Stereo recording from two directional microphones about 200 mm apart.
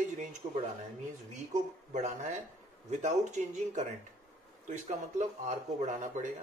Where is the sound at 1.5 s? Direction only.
35° right (ahead or behind).